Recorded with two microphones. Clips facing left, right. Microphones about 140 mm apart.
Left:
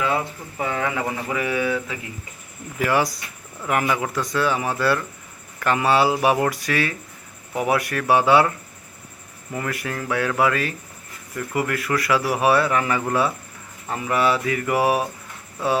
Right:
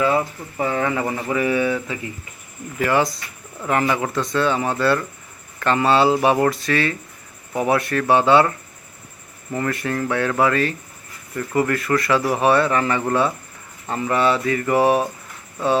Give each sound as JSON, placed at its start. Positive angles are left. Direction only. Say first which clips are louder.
{"t": 0.6, "sound": "speech", "louder": "right 3 dB", "side_deg": 0}
{"t": 2.7, "sound": "a man's voice", "louder": "right 2 dB", "side_deg": 10}